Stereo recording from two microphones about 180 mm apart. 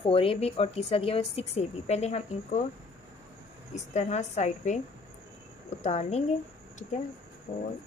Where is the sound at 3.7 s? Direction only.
40° left (ahead or behind).